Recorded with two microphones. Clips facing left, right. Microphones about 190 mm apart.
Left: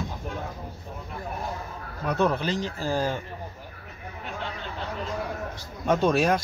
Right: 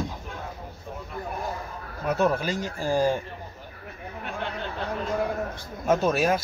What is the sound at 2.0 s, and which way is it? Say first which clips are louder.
Speech: right 1 dB; 10° right (ahead or behind).